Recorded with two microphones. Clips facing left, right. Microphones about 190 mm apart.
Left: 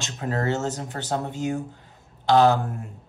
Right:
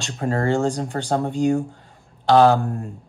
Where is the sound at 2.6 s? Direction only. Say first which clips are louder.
Right 5 dB; 20° left (ahead or behind).